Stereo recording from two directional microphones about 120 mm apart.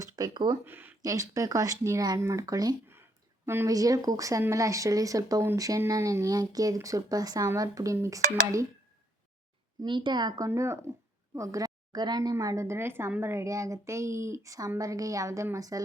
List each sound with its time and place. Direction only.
0.0 s speech: 35° right (ahead or behind)
0.6 s speech: 15° right (ahead or behind)
1.0 s speech: 30° right (ahead or behind)
9.8 s speech: 40° right (ahead or behind)